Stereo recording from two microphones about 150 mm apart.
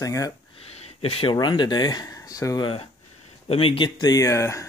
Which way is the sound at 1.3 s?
30° left (ahead or behind).